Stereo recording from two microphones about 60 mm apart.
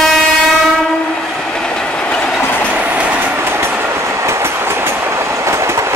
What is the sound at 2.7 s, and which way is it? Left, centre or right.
Train, right.